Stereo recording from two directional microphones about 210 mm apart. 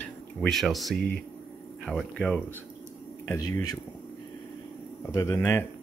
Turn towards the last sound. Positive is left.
turn(degrees=10)  # may be behind; listen again after turning